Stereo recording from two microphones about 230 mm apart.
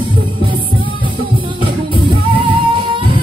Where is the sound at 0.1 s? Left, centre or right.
Right.